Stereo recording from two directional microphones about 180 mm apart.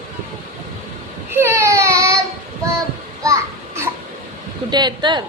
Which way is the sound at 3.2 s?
15° right (ahead or behind).